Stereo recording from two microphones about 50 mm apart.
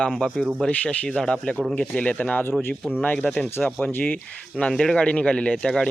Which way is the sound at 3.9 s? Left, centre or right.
Left.